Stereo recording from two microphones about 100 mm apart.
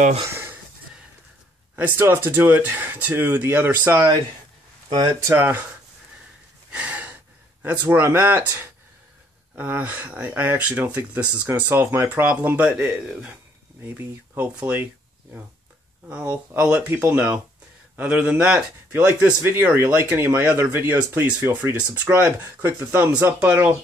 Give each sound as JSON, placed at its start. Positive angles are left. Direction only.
{"t": 0.3, "sound": "a sound", "side_deg": -20}
{"t": 1.8, "sound": "speech", "side_deg": -20}
{"t": 4.8, "sound": "speech", "side_deg": -50}
{"t": 5.2, "sound": "speech", "side_deg": -25}
{"t": 6.7, "sound": "gasp", "side_deg": -15}
{"t": 7.8, "sound": "speech", "side_deg": -20}
{"t": 16.1, "sound": "speech", "side_deg": -15}